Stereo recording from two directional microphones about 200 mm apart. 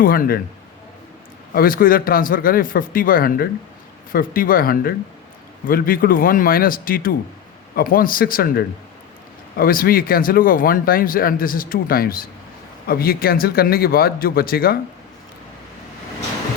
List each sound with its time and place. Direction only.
0.0 s speech: 45° left (ahead or behind)
1.5 s speech: 45° left (ahead or behind)